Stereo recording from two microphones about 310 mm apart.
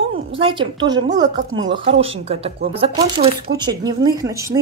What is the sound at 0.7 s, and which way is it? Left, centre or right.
A woman's voice, centre.